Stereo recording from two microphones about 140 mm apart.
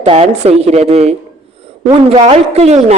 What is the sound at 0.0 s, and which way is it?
Speech, 45° right (ahead or behind).